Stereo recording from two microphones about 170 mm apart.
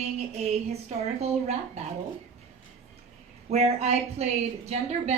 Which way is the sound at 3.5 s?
40° right (ahead or behind).